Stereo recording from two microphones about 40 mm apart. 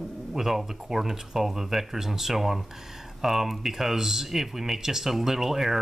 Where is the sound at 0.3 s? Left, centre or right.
Centre.